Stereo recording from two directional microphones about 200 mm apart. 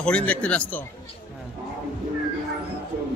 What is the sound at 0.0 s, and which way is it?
Speech, 5° left (ahead or behind).